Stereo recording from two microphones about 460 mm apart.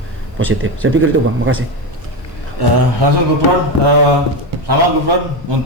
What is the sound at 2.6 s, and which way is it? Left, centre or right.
Speech, right.